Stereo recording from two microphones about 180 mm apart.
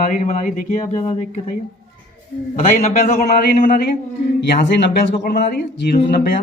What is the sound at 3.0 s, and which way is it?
Speech, 60° left (ahead or behind).